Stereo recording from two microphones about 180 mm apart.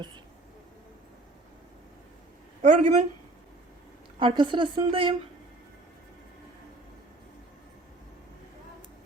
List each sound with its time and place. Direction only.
2.6 s speech: 40° right (ahead or behind)
4.2 s a woman's voice: 25° right (ahead or behind)